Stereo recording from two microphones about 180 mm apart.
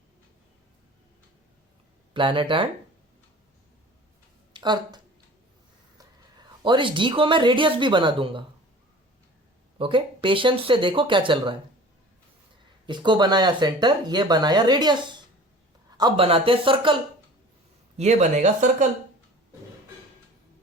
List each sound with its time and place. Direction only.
2.1 s speech: 30° right (ahead or behind)
4.5 s speech: 25° right (ahead or behind)
6.0 s speech: 25° right (ahead or behind)
9.7 s speech: 30° right (ahead or behind)
12.8 s speech: 25° right (ahead or behind)
17.9 s speech: 40° right (ahead or behind)